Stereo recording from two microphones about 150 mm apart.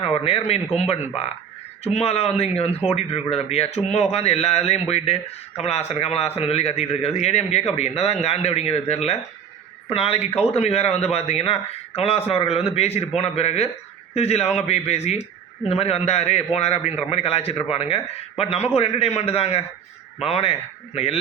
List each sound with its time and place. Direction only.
0.0 s speech: 40° left (ahead or behind)
14.4 s a man's voice: 5° right (ahead or behind)
14.7 s a man's voice: 45° left (ahead or behind)